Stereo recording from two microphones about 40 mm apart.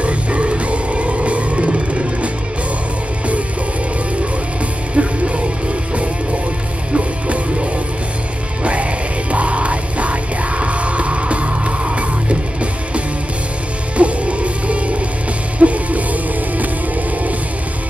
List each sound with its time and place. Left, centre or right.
0.0 s music: right
4.9 s music: right
6.9 s music: right
9.3 s music: right
13.9 s music: right